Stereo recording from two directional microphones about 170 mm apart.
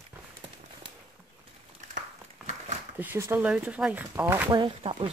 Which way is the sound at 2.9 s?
10° right (ahead or behind).